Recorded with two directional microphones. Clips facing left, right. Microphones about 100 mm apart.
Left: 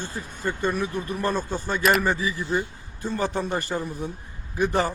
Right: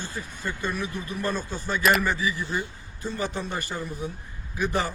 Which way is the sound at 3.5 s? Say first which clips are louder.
Left 5 dB; 35° left (ahead or behind).